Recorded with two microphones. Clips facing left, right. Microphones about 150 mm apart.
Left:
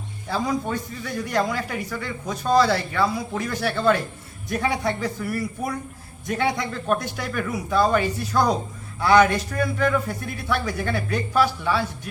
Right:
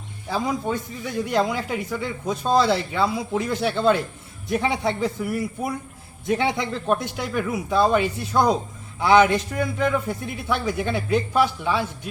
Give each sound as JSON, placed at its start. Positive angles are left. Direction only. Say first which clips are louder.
{"t": 0.3, "sound": "a man's voice", "louder": "even", "side_deg": -15}